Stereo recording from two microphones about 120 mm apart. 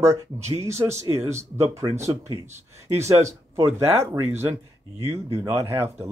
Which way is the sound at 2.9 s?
25° right (ahead or behind).